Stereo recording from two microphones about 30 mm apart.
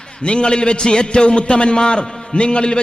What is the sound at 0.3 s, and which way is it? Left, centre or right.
A man's voice, left.